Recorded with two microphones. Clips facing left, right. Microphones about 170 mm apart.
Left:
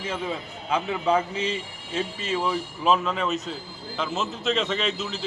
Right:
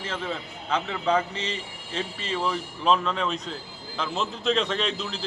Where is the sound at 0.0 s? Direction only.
10° left (ahead or behind).